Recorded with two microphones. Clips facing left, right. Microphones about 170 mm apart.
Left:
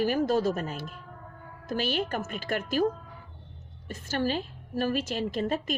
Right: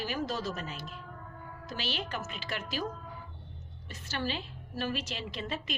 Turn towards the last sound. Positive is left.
turn(degrees=45)  # may be behind; listen again after turning